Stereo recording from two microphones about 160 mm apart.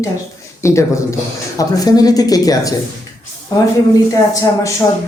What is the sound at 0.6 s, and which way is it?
Speech, 20° left (ahead or behind).